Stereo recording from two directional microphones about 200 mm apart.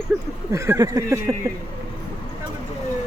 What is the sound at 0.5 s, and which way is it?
Speech, 15° right (ahead or behind).